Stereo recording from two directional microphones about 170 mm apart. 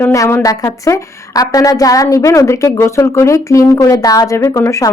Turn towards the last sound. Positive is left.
turn(degrees=20)  # may be behind; listen again after turning